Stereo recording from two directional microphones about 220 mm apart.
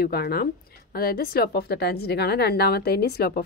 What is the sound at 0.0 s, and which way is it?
A woman's voice, 45° left (ahead or behind).